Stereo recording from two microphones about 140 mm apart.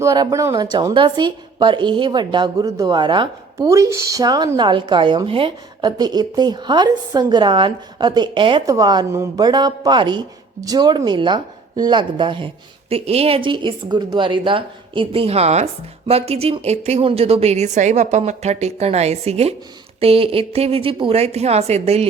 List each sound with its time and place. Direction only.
0.0 s speech: 25° right (ahead or behind)
3.7 s speech: 20° right (ahead or behind); by 8.6 s 35° right (ahead or behind)
8.6 s speech: 25° right (ahead or behind)
12.9 s a woman's voice: 45° right (ahead or behind)